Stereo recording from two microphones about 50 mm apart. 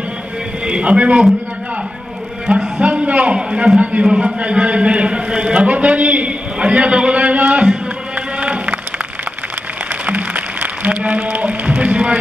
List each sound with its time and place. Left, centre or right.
0.7 s a man's voice: right
2.4 s a man's voice: centre
2.8 s a man's voice: right
4.4 s a sound: right
10.0 s music: right